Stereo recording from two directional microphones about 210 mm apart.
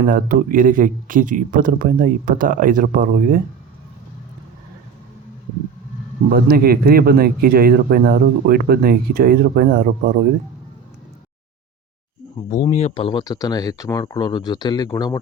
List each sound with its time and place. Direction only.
0.1 s speech: 40° right (ahead or behind)
6.3 s speech: 45° right (ahead or behind)
12.7 s speech: 30° left (ahead or behind)